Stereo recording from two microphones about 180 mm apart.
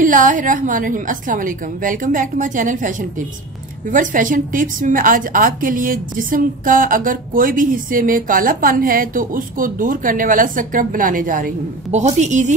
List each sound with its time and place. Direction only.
0.0 s a woman's voice: 45° right (ahead or behind)